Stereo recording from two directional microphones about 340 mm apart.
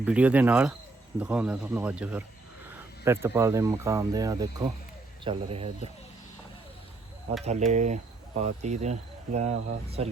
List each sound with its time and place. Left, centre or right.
0.0 s speech: centre
7.7 s speech: right